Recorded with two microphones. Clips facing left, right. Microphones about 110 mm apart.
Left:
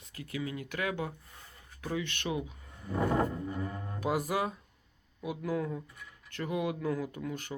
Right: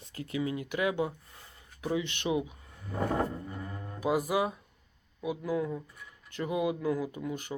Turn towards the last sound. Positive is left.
turn(degrees=-10)  # may be behind; listen again after turning